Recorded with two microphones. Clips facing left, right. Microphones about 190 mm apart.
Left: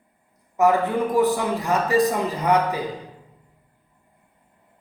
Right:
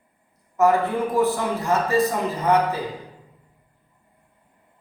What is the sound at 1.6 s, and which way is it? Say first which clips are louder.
Speech: right 1 dB; 15° left (ahead or behind).